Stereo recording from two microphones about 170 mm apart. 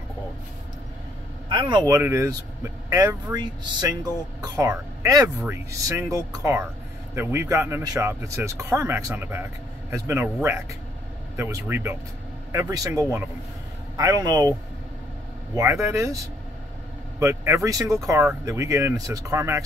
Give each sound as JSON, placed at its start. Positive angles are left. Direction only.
{"t": 1.5, "sound": "speech", "side_deg": -25}
{"t": 15.5, "sound": "speech", "side_deg": -15}
{"t": 17.2, "sound": "speech", "side_deg": -20}